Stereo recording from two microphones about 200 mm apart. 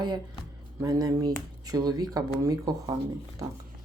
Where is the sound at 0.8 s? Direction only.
20° right (ahead or behind).